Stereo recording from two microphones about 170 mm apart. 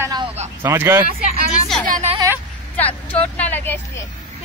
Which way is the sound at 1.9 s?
40° right (ahead or behind).